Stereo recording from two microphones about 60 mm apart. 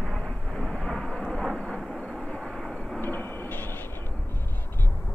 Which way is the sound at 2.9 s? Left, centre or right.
Left.